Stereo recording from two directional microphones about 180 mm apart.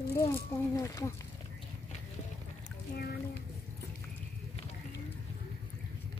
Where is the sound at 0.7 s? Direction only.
20° left (ahead or behind).